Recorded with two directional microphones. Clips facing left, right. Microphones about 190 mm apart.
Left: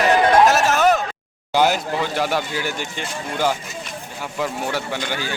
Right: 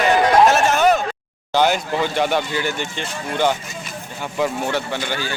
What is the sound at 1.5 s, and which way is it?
A man's voice, 5° left (ahead or behind).